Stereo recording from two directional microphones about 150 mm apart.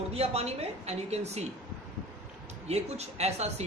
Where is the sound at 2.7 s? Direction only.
45° right (ahead or behind).